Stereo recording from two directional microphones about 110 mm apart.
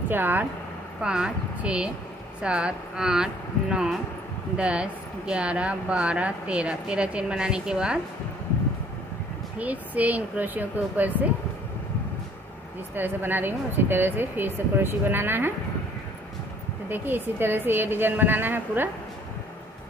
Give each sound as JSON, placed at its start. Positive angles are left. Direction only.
{"t": 0.1, "sound": "speech", "side_deg": -15}
{"t": 4.6, "sound": "speech", "side_deg": -10}
{"t": 9.6, "sound": "speech", "side_deg": -15}
{"t": 12.9, "sound": "speech", "side_deg": -15}
{"t": 16.9, "sound": "speech", "side_deg": -15}